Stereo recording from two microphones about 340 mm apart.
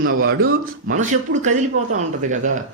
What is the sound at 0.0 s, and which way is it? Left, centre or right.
A man's voice, right.